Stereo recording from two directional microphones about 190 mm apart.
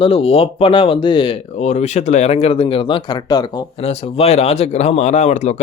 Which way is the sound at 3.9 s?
35° left (ahead or behind).